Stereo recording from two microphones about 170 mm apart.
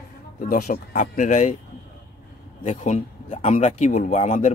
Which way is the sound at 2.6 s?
40° left (ahead or behind).